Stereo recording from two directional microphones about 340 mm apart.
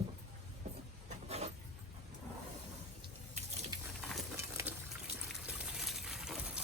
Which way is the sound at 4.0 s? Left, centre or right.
Centre.